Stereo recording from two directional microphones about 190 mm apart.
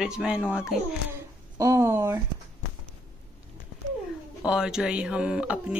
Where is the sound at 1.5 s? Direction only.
15° right (ahead or behind).